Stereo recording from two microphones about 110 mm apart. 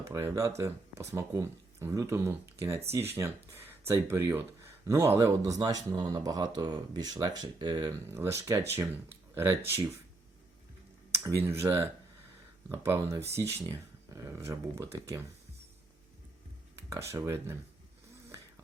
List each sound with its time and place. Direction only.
0.0 s speech: 25° right (ahead or behind)
8.0 s speech: 25° right (ahead or behind)
11.1 s speech: 25° right (ahead or behind)
16.9 s speech: 25° right (ahead or behind)